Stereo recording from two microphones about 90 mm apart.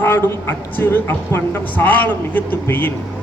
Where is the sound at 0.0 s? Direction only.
25° left (ahead or behind).